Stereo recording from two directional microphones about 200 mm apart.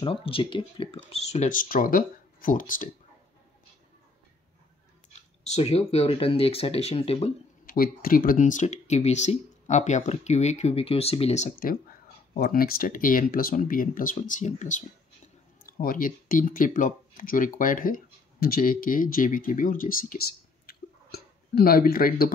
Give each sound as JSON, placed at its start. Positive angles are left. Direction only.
{"t": 0.0, "sound": "speech", "side_deg": 25}
{"t": 5.4, "sound": "speech", "side_deg": 30}
{"t": 7.6, "sound": "speech", "side_deg": 45}
{"t": 12.4, "sound": "speech", "side_deg": 45}
{"t": 20.6, "sound": "a sound", "side_deg": 50}